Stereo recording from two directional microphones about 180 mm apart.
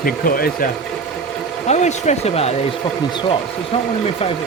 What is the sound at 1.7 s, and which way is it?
Speech, 40° left (ahead or behind).